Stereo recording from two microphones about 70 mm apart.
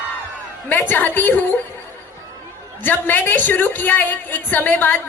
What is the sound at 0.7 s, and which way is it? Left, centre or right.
Speech, left.